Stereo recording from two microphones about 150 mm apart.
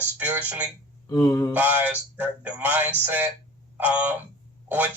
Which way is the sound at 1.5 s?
10° right (ahead or behind).